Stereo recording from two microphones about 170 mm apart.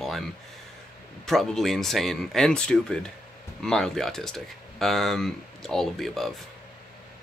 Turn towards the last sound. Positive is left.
turn(degrees=0)  # may be behind; listen again after turning